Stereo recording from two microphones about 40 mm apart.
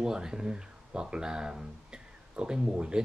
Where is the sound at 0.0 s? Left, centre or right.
Centre.